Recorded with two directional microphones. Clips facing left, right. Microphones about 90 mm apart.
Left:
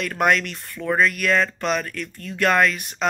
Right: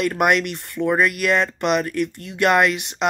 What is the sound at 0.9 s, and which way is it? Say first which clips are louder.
Speech: right 1 dB; 15° right (ahead or behind).